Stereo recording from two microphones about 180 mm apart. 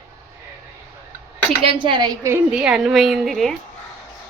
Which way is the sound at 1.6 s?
30° right (ahead or behind).